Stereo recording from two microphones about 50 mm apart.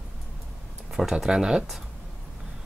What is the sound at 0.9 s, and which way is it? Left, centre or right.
Speech, centre.